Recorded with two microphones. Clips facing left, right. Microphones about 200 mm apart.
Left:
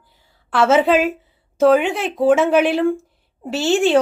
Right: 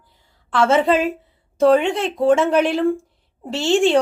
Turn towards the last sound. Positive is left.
turn(degrees=5)  # may be behind; listen again after turning